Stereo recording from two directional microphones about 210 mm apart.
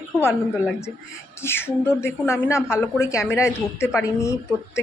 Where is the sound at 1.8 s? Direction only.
10° left (ahead or behind).